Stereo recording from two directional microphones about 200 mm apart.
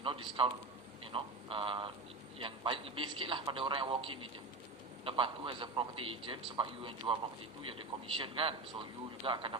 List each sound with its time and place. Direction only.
0.0 s a man's voice: 25° right (ahead or behind)
1.1 s a sound: 25° right (ahead or behind)
2.4 s a man's voice: 25° right (ahead or behind)